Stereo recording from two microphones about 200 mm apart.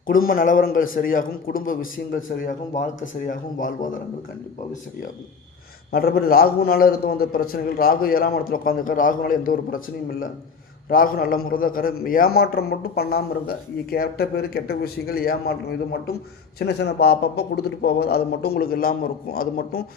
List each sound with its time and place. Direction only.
0.1 s a man's voice: 45° left (ahead or behind)
5.9 s a man's voice: 50° left (ahead or behind)